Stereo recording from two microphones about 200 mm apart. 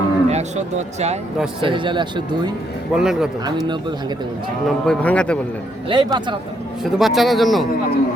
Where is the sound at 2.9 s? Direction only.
Centre (ahead or behind).